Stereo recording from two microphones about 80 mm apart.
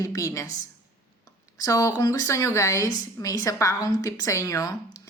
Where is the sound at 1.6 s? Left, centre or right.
Left.